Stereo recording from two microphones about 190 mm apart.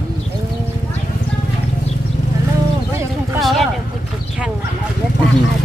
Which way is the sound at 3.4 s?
Centre (ahead or behind).